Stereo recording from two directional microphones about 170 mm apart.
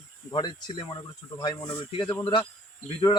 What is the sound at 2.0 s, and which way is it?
Speech, 25° left (ahead or behind).